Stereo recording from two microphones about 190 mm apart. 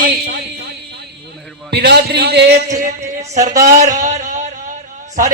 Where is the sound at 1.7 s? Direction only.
60° right (ahead or behind).